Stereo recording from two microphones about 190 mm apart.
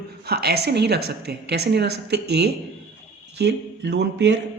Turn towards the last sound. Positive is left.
turn(degrees=-65)  # may be behind; listen again after turning